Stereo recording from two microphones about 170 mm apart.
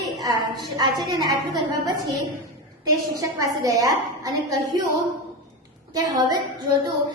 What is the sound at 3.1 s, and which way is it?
A woman's voice, 20° right (ahead or behind).